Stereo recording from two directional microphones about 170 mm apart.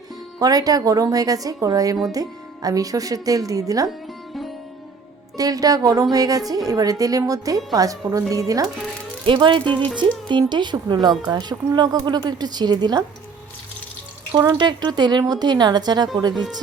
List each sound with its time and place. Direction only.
0.3 s speech: 20° right (ahead or behind)
5.4 s speech: 20° right (ahead or behind)
14.3 s speech: 25° right (ahead or behind)